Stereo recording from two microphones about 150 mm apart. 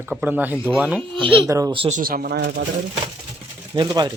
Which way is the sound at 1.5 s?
20° right (ahead or behind).